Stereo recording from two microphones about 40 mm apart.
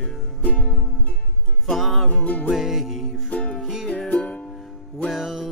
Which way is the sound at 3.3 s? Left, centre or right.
Left.